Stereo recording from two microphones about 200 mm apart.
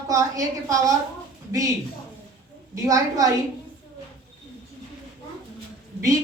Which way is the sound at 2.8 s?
15° right (ahead or behind).